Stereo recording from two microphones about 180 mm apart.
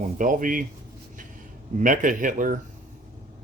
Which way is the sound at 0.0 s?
50° right (ahead or behind).